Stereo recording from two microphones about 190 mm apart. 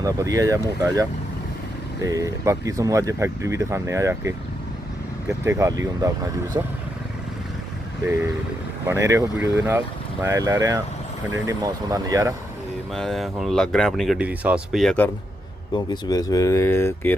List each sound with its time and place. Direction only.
0.0 s speech: 15° right (ahead or behind)
5.5 s speech: 15° right (ahead or behind)
8.9 s speech: 15° right (ahead or behind)
12.9 s speech: centre (ahead or behind)
15.7 s speech: 20° left (ahead or behind)